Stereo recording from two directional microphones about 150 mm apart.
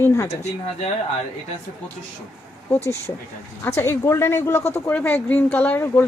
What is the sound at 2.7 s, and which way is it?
Speech, 15° left (ahead or behind).